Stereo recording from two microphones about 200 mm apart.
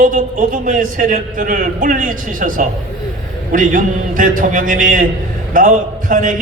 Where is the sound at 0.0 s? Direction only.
40° right (ahead or behind).